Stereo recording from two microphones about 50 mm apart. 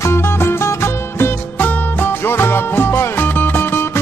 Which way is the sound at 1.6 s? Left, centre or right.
Left.